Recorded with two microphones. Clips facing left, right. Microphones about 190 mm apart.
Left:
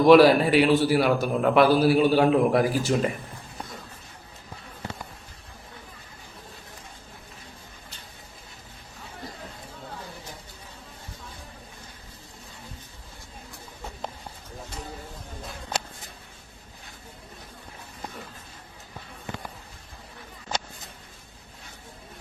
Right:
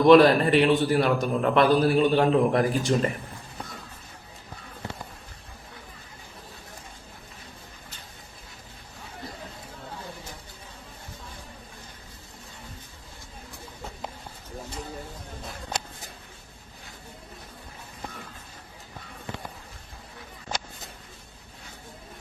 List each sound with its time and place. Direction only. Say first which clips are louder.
0.1 s a man's voice: left 1 dB; 5° left (ahead or behind)